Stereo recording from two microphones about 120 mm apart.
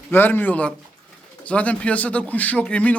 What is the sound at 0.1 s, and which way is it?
Speech, 15° left (ahead or behind).